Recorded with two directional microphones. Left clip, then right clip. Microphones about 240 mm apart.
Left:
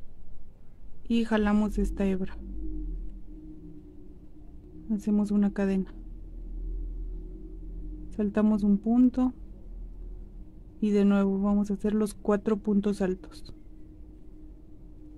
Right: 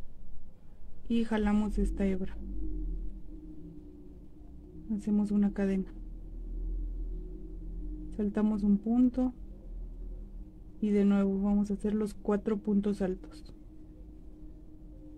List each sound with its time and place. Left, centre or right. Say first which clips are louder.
1.0 s speech: left 5 dB; left
4.9 s speech: left 3 dB; left
8.2 s speech: left 5 dB; left
10.8 s speech: left 4 dB; left